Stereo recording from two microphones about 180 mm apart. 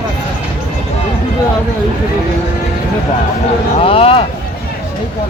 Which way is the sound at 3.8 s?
30° left (ahead or behind).